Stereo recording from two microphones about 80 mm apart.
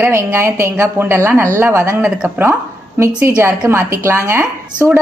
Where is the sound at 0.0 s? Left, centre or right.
Right.